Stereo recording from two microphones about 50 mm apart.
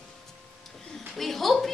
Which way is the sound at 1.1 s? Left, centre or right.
Centre.